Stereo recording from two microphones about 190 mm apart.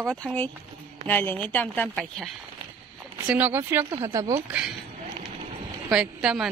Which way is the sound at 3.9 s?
25° right (ahead or behind).